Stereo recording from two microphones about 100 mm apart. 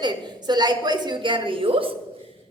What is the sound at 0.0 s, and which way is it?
A woman's voice, 45° right (ahead or behind).